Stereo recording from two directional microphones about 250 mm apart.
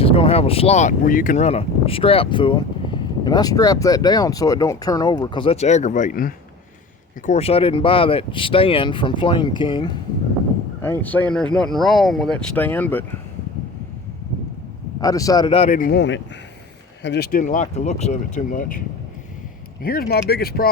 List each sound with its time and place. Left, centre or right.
0.0 s speech: left
10.8 s speech: centre
15.0 s speech: centre; by 18.8 s left
19.8 s speech: left